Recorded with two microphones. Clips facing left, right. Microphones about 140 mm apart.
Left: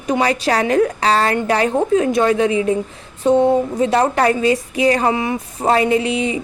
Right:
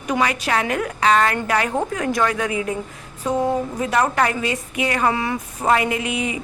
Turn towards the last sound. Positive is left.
turn(degrees=30)  # may be behind; listen again after turning